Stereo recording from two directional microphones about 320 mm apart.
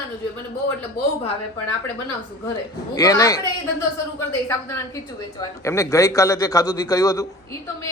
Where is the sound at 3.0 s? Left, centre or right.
Centre.